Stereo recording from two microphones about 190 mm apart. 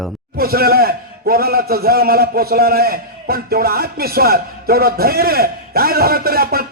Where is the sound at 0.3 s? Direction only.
55° right (ahead or behind).